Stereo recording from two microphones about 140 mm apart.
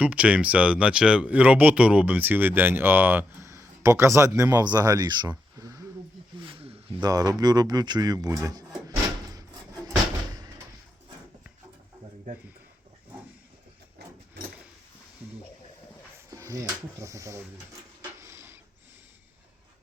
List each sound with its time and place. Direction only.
0.0 s speech: 10° right (ahead or behind); by 5.8 s 25° right (ahead or behind)
6.4 s snake: 40° right (ahead or behind)
7.0 s speech: 25° right (ahead or behind)
16.3 s speech: 20° right (ahead or behind)
18.2 s a sound: 20° right (ahead or behind)